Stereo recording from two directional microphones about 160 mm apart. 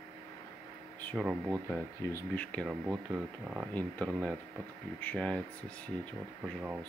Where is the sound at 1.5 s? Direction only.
15° left (ahead or behind).